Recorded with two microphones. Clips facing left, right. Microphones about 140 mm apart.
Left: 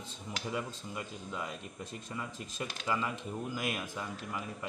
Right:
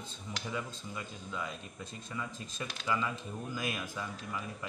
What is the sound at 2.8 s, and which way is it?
Speech, 25° left (ahead or behind).